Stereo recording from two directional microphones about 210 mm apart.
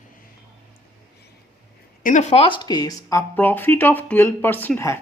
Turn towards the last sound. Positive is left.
turn(degrees=10)  # may be behind; listen again after turning